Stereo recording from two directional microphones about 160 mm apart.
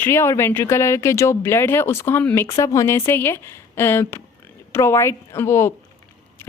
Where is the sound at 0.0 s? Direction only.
15° left (ahead or behind).